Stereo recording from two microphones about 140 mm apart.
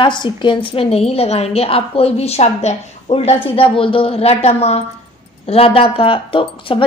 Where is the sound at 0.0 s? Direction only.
35° left (ahead or behind).